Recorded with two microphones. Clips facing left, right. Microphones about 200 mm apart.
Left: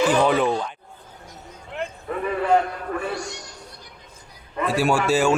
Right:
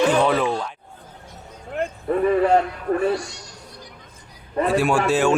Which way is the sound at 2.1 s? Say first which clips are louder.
Right 8 dB; 40° right (ahead or behind).